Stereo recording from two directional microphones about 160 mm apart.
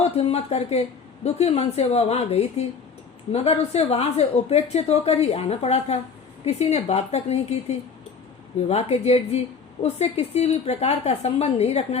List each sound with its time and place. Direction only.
0.0 s speech: 40° left (ahead or behind)
8.6 s speech: 40° left (ahead or behind)